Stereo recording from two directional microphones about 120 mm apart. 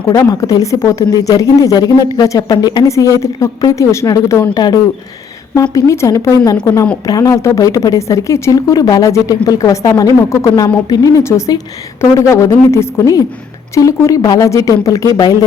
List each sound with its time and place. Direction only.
0.1 s speech: 30° left (ahead or behind)